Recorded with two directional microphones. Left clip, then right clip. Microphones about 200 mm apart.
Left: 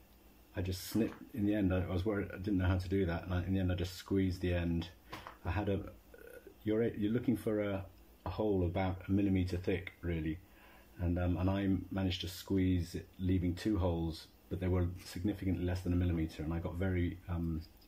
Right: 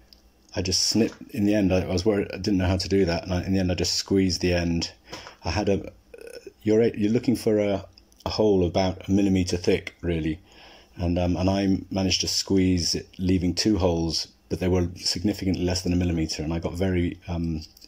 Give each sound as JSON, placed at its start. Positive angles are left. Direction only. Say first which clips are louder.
{"t": 0.6, "sound": "speech", "louder": "right 14 dB", "side_deg": -40}
{"t": 11.0, "sound": "speech", "louder": "right 12 dB", "side_deg": -40}